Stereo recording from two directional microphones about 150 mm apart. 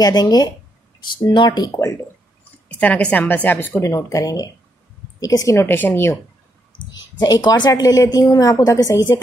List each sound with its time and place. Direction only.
0.0 s a woman's voice: 25° left (ahead or behind)
2.7 s a woman's voice: 10° left (ahead or behind)
6.9 s a woman's voice: 25° left (ahead or behind)